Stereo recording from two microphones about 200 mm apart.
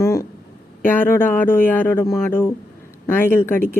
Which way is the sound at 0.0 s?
15° left (ahead or behind).